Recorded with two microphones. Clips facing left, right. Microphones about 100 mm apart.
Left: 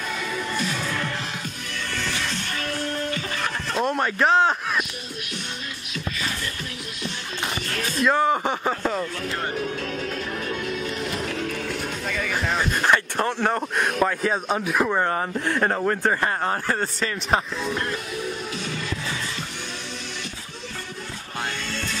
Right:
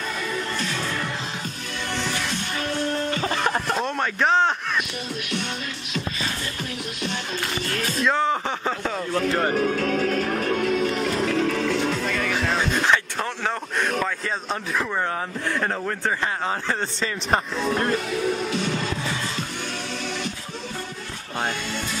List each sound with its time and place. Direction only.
0.6 s music: 5° left (ahead or behind)
3.7 s a sound: 5° left (ahead or behind)
8.0 s speech: 5° left (ahead or behind)
9.5 s music: 65° right (ahead or behind); by 12.1 s 90° right
12.1 s speech: 5° left (ahead or behind)
16.4 s speech: centre (ahead or behind)
17.6 s music: 40° right (ahead or behind)